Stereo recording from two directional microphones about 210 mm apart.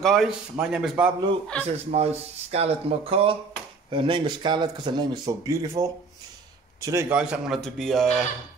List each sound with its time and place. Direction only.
0.0 s a man's voice: centre (ahead or behind)
1.7 s a man's voice: 30° right (ahead or behind); by 8.1 s centre (ahead or behind)